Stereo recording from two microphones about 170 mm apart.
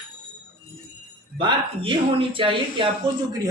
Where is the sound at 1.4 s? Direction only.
30° right (ahead or behind).